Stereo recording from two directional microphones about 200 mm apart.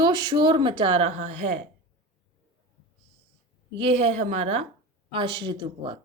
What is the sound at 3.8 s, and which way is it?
Speech, 30° right (ahead or behind).